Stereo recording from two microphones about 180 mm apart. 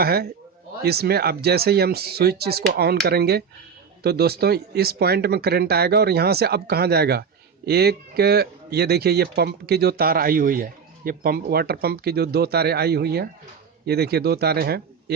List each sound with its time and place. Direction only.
0.0 s a man's voice: 60° right (ahead or behind)